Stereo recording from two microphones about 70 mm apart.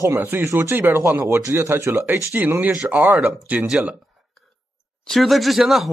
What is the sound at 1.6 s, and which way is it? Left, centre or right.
Speech, right.